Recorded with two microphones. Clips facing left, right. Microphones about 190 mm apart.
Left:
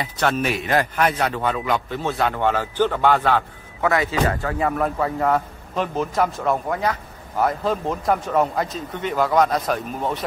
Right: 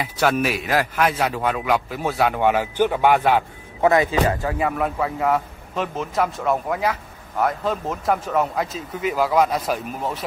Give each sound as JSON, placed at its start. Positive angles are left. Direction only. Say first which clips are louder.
{"t": 0.0, "sound": "a man's voice", "louder": "right 2 dB", "side_deg": -5}